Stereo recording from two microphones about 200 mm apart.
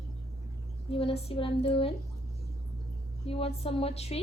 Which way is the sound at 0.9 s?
30° left (ahead or behind).